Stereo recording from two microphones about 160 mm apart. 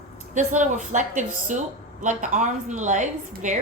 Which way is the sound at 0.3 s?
50° right (ahead or behind).